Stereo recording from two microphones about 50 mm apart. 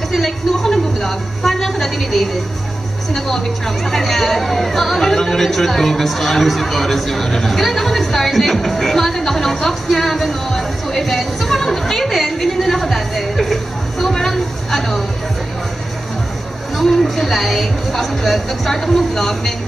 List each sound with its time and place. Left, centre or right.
0.1 s a woman's voice: centre
16.7 s speech: centre